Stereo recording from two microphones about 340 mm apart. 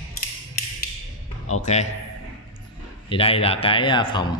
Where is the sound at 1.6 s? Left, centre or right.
Left.